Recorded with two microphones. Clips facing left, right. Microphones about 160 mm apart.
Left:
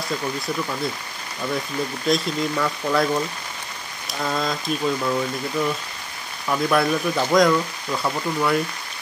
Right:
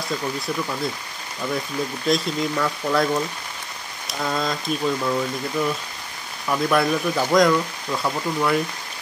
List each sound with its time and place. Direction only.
2.0 s speech: centre (ahead or behind)